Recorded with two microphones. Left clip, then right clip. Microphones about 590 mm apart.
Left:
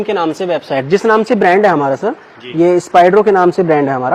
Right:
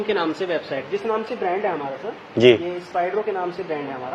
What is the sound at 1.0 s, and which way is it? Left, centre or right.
Speech, left.